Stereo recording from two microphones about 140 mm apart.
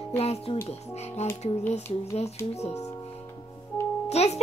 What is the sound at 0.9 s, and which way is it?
A woman's voice, 50° left (ahead or behind).